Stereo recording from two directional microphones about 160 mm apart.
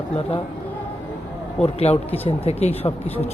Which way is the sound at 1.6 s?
40° left (ahead or behind).